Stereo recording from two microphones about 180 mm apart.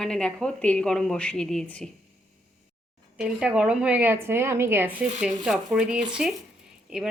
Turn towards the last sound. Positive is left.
turn(degrees=-5)  # may be behind; listen again after turning